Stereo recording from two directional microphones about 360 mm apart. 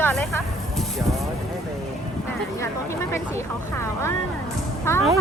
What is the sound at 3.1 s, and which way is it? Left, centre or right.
Speech, centre.